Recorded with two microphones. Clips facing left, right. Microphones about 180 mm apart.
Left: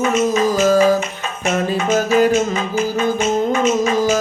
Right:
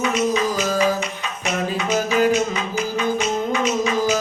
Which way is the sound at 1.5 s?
45° left (ahead or behind).